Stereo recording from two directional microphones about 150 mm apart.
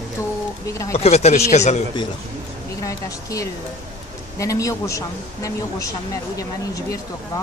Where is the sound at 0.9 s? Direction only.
45° left (ahead or behind).